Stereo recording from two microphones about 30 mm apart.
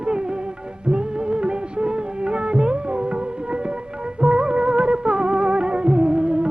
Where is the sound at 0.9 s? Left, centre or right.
Right.